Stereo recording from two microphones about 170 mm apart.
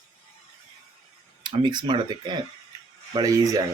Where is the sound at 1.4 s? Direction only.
25° right (ahead or behind).